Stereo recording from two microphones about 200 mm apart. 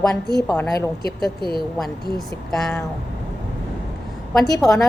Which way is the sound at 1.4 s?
25° right (ahead or behind).